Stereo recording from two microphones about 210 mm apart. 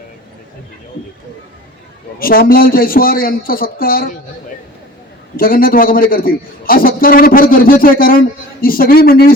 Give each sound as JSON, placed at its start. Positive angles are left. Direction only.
{"t": 2.1, "sound": "a man's voice", "side_deg": 45}
{"t": 5.4, "sound": "a man's voice", "side_deg": 45}